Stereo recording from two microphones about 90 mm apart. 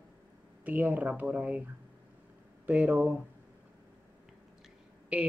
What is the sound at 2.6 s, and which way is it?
Speech, 15° right (ahead or behind).